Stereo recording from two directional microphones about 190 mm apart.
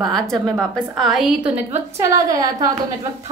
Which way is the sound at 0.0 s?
Centre (ahead or behind).